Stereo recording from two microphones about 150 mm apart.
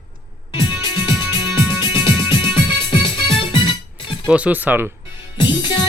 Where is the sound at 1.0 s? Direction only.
35° left (ahead or behind).